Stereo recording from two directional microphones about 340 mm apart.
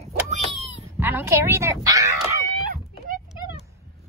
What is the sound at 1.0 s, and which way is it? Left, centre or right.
Speech, centre.